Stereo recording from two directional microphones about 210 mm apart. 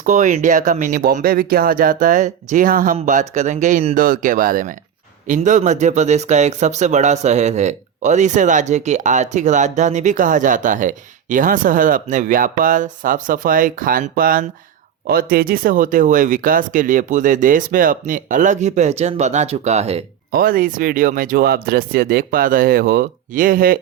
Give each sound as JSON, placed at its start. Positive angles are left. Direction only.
{"t": 0.0, "sound": "speech", "side_deg": -35}
{"t": 20.3, "sound": "speech", "side_deg": -45}